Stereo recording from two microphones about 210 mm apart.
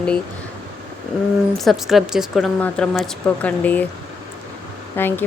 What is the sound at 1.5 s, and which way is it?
Speech, centre (ahead or behind).